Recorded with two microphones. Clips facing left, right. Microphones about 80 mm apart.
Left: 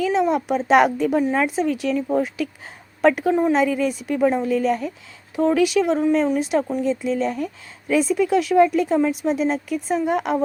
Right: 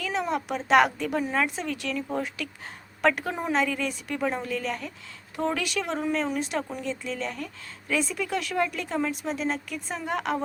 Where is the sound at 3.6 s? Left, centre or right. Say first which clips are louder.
Left 8 dB; centre.